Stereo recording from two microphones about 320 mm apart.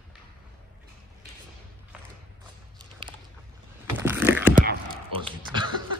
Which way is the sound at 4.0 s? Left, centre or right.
Centre.